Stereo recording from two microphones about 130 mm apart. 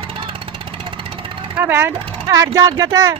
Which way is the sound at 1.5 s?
15° right (ahead or behind).